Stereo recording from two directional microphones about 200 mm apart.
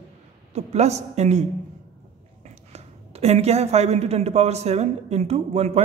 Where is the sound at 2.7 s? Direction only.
30° right (ahead or behind).